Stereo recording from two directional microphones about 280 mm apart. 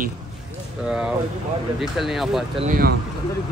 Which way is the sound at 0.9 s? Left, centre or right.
Centre.